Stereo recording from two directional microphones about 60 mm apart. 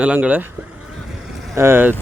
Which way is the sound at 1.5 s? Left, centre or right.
Right.